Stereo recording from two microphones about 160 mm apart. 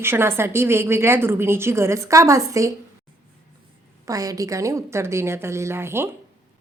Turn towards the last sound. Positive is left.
turn(degrees=-15)  # may be behind; listen again after turning